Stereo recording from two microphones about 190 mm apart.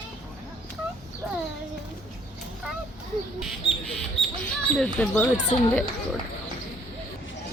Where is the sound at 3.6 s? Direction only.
30° left (ahead or behind).